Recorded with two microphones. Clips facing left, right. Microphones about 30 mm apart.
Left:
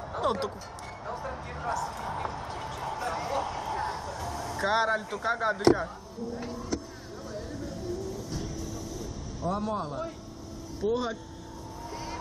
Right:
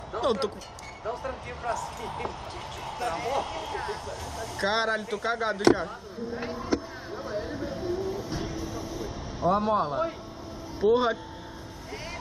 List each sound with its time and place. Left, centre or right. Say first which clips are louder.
0.2 s speech: right 2 dB; right
4.6 s speech: even; right
6.2 s a sound: right 3 dB; right
10.8 s speech: right 6 dB; right